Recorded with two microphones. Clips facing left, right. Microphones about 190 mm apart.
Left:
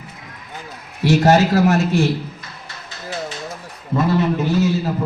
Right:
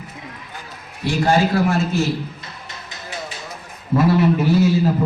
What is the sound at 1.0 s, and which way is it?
Speech, 45° left (ahead or behind).